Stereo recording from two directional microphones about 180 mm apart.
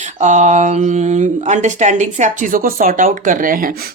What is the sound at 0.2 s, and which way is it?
Speech, 40° right (ahead or behind).